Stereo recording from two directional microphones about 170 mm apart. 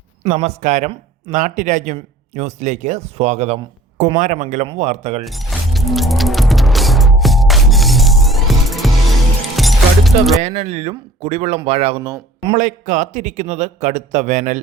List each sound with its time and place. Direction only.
0.3 s speech: 45° right (ahead or behind)
5.2 s music: centre (ahead or behind)
10.4 s speech: 40° right (ahead or behind)
12.0 s speech: 20° right (ahead or behind)
12.5 s speech: 45° right (ahead or behind)